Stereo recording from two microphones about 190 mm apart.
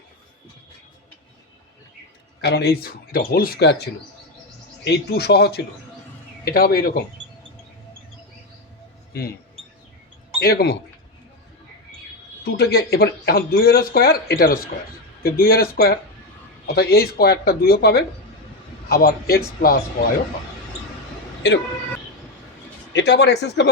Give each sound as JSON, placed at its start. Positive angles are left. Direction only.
{"t": 2.4, "sound": "speech", "side_deg": 55}
{"t": 4.9, "sound": "speech", "side_deg": 60}
{"t": 10.4, "sound": "speech", "side_deg": 55}
{"t": 12.5, "sound": "speech", "side_deg": 55}
{"t": 21.4, "sound": "speech", "side_deg": 65}
{"t": 22.9, "sound": "speech", "side_deg": 65}